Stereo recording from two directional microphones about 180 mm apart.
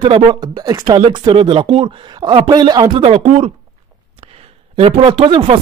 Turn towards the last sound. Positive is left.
turn(degrees=-30)  # may be behind; listen again after turning